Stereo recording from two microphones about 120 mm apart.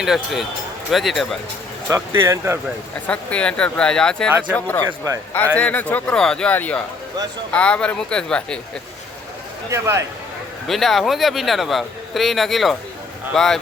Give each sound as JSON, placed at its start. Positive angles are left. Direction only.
{"t": 0.0, "sound": "speech", "side_deg": -5}
{"t": 1.9, "sound": "speech", "side_deg": -25}
{"t": 3.1, "sound": "speech", "side_deg": 10}
{"t": 4.5, "sound": "speech", "side_deg": 15}
{"t": 9.6, "sound": "speech", "side_deg": -25}
{"t": 10.7, "sound": "speech", "side_deg": 0}